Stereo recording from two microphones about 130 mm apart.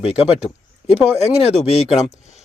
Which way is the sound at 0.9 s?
55° left (ahead or behind).